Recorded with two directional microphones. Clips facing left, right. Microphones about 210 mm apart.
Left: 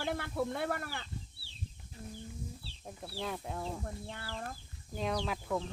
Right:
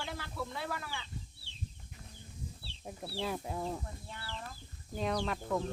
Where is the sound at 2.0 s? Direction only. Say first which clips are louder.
Left 11 dB; 35° left (ahead or behind).